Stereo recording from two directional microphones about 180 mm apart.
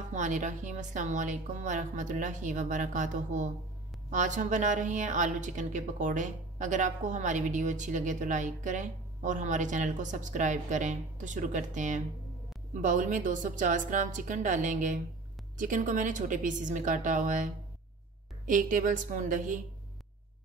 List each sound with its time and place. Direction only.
0.1 s a woman's voice: 40° right (ahead or behind)